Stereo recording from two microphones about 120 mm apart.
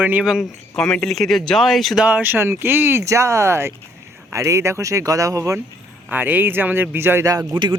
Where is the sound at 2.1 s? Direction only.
15° right (ahead or behind).